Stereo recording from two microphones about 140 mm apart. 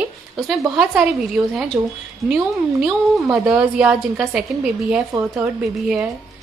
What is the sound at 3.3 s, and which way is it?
A woman's voice, 5° right (ahead or behind).